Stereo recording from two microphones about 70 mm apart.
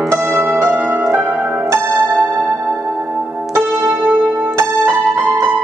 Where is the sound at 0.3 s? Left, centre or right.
Right.